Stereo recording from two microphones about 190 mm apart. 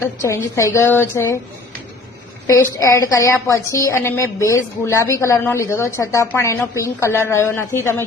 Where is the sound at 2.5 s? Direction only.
15° left (ahead or behind).